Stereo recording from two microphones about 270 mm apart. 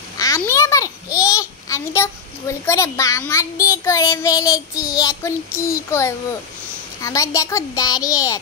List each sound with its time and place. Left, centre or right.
0.2 s a child's voice: centre